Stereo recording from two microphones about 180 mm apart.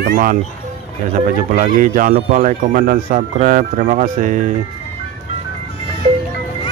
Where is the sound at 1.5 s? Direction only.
45° right (ahead or behind).